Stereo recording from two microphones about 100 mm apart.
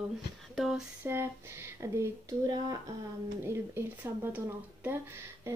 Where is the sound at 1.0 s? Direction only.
25° right (ahead or behind).